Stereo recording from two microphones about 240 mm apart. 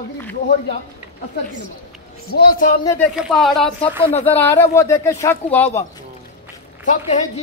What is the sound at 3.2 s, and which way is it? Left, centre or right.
Speech, centre.